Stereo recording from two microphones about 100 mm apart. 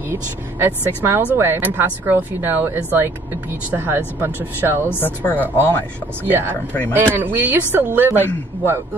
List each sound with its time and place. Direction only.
0.1 s speech: 25° right (ahead or behind)
4.8 s speech: 20° left (ahead or behind)
6.2 s speech: 20° right (ahead or behind)